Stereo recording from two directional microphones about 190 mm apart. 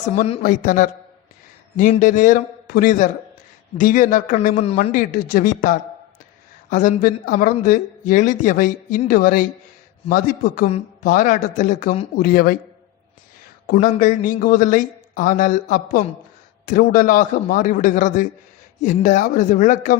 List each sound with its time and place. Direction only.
0.3 s a man's voice: 40° left (ahead or behind)
4.8 s speech: 45° left (ahead or behind)
13.8 s speech: 45° left (ahead or behind)